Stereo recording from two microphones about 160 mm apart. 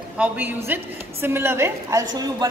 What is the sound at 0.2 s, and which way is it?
A woman's voice, 10° right (ahead or behind).